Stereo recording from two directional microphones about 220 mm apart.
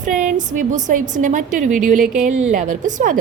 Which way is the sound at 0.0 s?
35° right (ahead or behind).